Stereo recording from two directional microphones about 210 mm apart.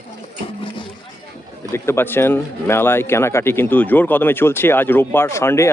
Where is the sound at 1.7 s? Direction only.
10° left (ahead or behind).